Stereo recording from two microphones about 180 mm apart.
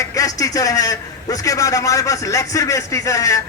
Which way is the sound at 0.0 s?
20° left (ahead or behind).